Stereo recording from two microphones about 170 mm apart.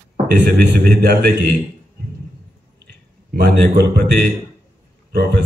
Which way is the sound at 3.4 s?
60° right (ahead or behind).